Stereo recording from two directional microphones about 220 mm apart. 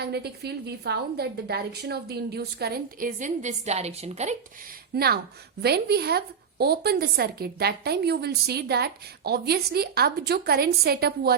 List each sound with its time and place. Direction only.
0.0 s a woman's voice: 45° right (ahead or behind); by 4.4 s 30° right (ahead or behind)
4.9 s a woman's voice: 45° right (ahead or behind)